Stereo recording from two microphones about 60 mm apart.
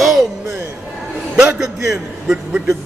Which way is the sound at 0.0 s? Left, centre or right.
Centre.